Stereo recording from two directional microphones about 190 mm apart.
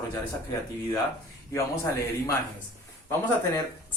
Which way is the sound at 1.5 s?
15° left (ahead or behind).